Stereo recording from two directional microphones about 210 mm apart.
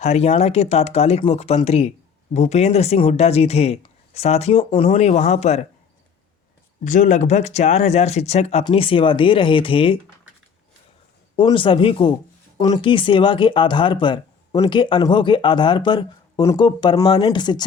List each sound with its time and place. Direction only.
0.0 s speech: 30° left (ahead or behind)
6.8 s speech: 35° left (ahead or behind)
11.3 s speech: 25° left (ahead or behind)